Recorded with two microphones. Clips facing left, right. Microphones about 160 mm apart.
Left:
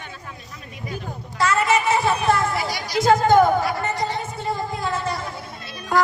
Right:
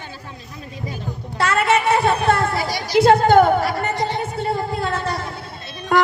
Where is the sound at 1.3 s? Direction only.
60° right (ahead or behind).